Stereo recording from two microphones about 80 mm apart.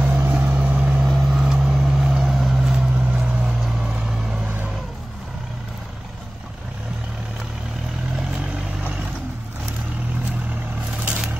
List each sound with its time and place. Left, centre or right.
0.0 s vehicle: centre
1.0 s vehicle: centre